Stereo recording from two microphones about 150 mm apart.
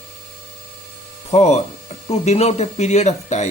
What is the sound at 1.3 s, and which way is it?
Speech, 45° left (ahead or behind).